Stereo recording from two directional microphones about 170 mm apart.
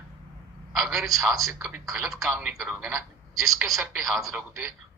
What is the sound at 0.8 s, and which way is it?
Speech, centre (ahead or behind).